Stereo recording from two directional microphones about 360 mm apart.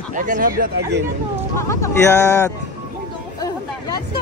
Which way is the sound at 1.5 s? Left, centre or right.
Centre.